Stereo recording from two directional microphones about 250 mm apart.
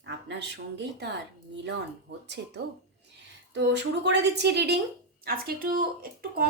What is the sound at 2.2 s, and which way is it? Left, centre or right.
A woman's voice, right.